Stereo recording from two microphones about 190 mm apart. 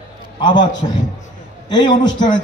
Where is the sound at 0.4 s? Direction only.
25° left (ahead or behind).